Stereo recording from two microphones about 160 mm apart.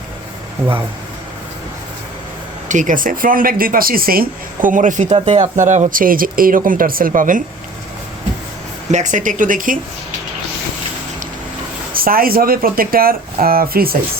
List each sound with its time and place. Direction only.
0.6 s speech: 15° right (ahead or behind)
2.6 s speech: 50° right (ahead or behind)
5.1 s speech: 40° right (ahead or behind); by 7.4 s 55° right (ahead or behind)
8.9 s speech: 50° right (ahead or behind)
11.9 s speech: 65° right (ahead or behind)